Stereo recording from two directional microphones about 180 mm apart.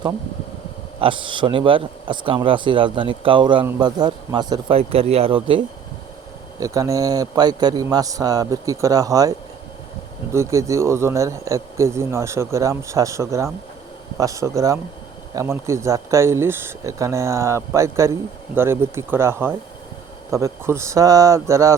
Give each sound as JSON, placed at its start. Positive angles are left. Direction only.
{"t": 1.0, "sound": "a man's voice", "side_deg": -30}
{"t": 6.6, "sound": "a man's voice", "side_deg": -20}
{"t": 10.3, "sound": "a man's voice", "side_deg": -15}